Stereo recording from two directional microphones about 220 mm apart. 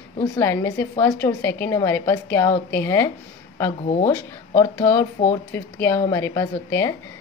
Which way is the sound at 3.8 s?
30° left (ahead or behind).